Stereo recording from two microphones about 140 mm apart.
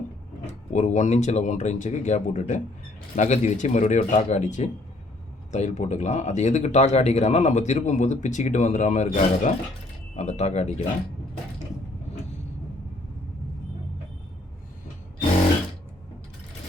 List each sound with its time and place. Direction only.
0.4 s speech: 60° left (ahead or behind)